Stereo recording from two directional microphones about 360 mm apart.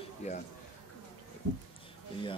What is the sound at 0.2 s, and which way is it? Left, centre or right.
Speech, centre.